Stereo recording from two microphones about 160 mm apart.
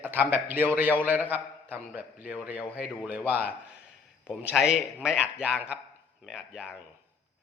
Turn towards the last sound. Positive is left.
turn(degrees=-5)  # may be behind; listen again after turning